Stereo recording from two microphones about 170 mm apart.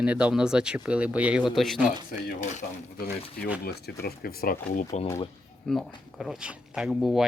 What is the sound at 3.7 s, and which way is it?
Speech, 70° left (ahead or behind).